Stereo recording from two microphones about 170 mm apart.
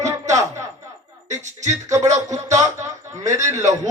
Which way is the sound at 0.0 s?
15° right (ahead or behind).